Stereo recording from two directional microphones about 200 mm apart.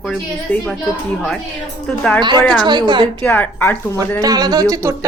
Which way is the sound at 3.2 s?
10° left (ahead or behind).